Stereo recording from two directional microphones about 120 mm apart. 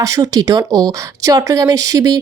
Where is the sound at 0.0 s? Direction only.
30° right (ahead or behind).